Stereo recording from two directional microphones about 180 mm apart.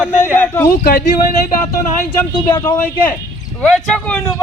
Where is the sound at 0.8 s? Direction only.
55° left (ahead or behind).